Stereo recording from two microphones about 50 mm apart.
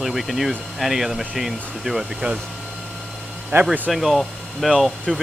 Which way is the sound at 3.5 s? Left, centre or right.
Right.